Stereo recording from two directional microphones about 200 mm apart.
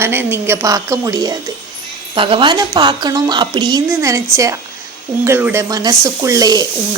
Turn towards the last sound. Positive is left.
turn(degrees=-20)  # may be behind; listen again after turning